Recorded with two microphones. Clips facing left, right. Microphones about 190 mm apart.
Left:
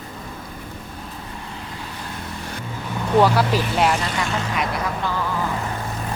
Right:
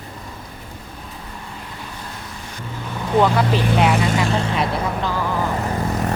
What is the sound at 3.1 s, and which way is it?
Speech, 5° left (ahead or behind).